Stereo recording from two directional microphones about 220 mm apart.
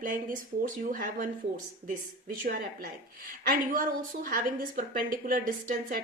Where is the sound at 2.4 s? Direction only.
40° right (ahead or behind).